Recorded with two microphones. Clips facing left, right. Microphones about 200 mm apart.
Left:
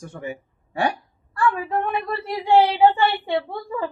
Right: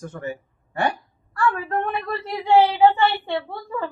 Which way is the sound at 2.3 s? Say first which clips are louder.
Even; 15° left (ahead or behind).